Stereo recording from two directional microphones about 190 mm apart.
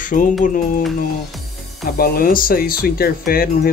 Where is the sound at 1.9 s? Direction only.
50° left (ahead or behind).